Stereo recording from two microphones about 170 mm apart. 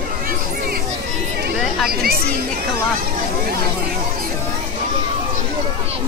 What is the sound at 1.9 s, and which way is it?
Chatter, 60° right (ahead or behind).